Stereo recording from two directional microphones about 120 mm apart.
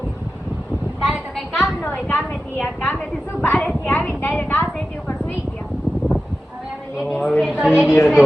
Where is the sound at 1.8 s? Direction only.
15° left (ahead or behind).